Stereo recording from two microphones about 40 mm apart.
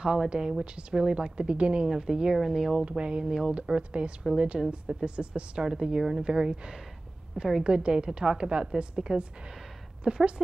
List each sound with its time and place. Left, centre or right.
0.3 s a woman's voice: right
2.3 s a woman's voice: centre
2.8 s a woman's voice: right